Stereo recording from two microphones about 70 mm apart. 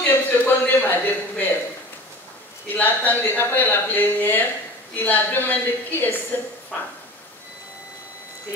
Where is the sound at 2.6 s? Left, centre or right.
Left.